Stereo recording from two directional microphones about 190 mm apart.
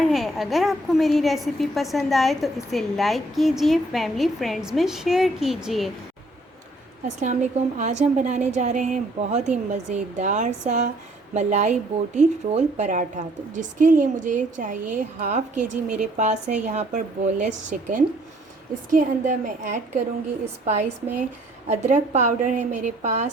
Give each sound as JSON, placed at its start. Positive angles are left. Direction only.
{"t": 0.1, "sound": "a woman's voice", "side_deg": 0}
{"t": 7.8, "sound": "a woman's voice", "side_deg": -40}